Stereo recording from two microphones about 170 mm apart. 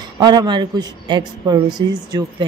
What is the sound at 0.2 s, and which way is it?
A man's voice, 25° right (ahead or behind).